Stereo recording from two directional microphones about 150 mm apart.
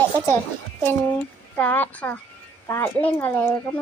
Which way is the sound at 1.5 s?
10° left (ahead or behind).